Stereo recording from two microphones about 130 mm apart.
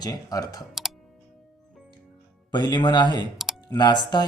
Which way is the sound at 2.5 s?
35° left (ahead or behind).